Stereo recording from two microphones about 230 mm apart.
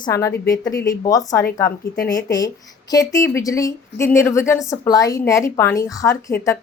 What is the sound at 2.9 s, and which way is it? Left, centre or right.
A woman's voice, centre.